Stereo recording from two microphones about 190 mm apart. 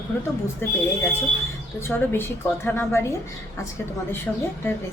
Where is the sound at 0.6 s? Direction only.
10° left (ahead or behind).